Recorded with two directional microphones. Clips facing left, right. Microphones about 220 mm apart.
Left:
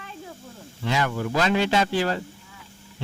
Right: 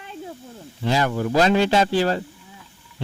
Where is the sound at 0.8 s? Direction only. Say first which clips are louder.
Right 4 dB; 35° right (ahead or behind).